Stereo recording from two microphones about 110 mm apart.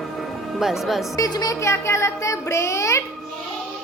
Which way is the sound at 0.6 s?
5° right (ahead or behind).